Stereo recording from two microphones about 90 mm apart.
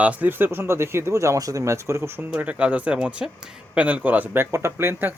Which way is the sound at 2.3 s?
15° right (ahead or behind).